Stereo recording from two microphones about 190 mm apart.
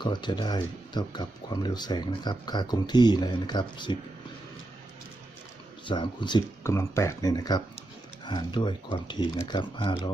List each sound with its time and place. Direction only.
0.0 s speech: 25° left (ahead or behind)
5.8 s speech: 25° left (ahead or behind)